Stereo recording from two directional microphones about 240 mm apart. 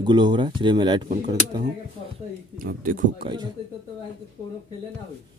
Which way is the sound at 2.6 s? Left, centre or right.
Right.